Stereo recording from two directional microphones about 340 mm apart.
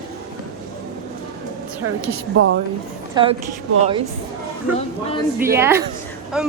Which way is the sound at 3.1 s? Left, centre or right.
Centre.